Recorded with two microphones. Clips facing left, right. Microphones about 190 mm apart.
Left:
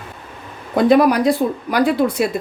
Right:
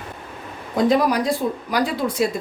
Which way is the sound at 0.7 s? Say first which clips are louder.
Left 5 dB; 60° left (ahead or behind).